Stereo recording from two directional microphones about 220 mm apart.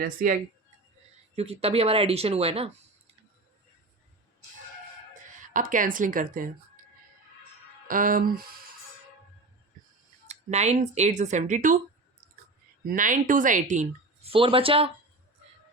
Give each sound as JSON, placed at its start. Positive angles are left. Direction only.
{"t": 0.2, "sound": "speech", "side_deg": -40}
{"t": 1.4, "sound": "speech", "side_deg": -25}
{"t": 5.4, "sound": "speech", "side_deg": -35}
{"t": 7.9, "sound": "speech", "side_deg": -40}
{"t": 10.2, "sound": "speech", "side_deg": -30}
{"t": 12.8, "sound": "speech", "side_deg": -40}